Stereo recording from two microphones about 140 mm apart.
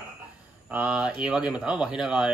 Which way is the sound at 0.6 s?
10° right (ahead or behind).